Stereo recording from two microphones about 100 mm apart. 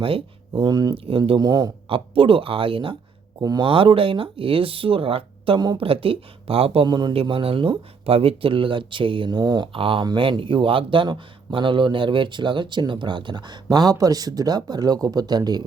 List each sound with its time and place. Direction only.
0.6 s speech: 45° right (ahead or behind)
0.9 s speech: 65° right (ahead or behind)
1.4 s speech: 45° right (ahead or behind)
1.9 s speech: 65° right (ahead or behind)
3.4 s speech: 40° right (ahead or behind)
3.7 s speech: 65° right (ahead or behind)
6.8 s speech: 45° right (ahead or behind)
7.1 s speech: 65° right (ahead or behind); by 9.6 s 45° right (ahead or behind)
9.7 s speech: 65° right (ahead or behind); by 15.6 s 45° right (ahead or behind)